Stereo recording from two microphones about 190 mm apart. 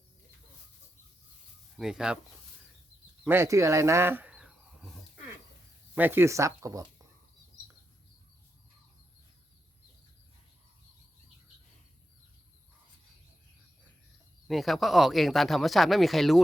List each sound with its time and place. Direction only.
1.7 s speech: 5° right (ahead or behind)
3.2 s speech: 15° right (ahead or behind)
14.4 s speech: centre (ahead or behind)